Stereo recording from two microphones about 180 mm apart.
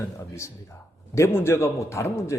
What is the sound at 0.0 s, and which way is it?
A man's voice, 15° left (ahead or behind).